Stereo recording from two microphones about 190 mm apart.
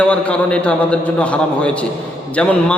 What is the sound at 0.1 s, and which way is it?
A man's voice, 5° left (ahead or behind).